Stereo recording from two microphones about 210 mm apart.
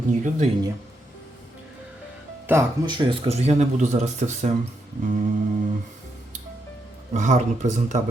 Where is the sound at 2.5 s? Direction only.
15° right (ahead or behind); by 4.5 s 35° right (ahead or behind).